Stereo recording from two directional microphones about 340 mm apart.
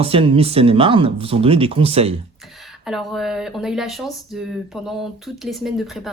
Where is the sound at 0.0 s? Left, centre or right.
Centre.